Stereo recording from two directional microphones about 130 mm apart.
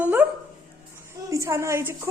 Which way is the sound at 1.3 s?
25° right (ahead or behind).